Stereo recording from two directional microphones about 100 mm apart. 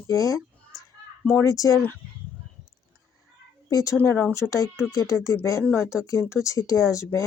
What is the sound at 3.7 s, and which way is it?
Speech, 30° left (ahead or behind).